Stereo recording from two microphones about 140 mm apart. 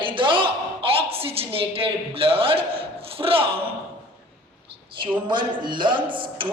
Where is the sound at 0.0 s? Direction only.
35° right (ahead or behind).